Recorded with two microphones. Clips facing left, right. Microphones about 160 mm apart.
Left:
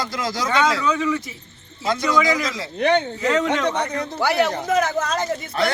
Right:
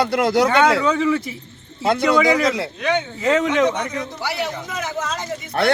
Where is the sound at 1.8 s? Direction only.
65° right (ahead or behind).